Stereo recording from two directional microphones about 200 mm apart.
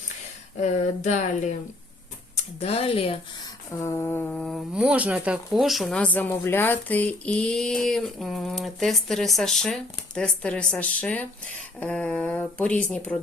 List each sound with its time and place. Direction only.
0.5 s speech: 35° left (ahead or behind)
3.8 s speech: 10° left (ahead or behind)